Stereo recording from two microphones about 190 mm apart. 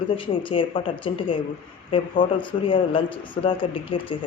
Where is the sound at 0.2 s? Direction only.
25° left (ahead or behind).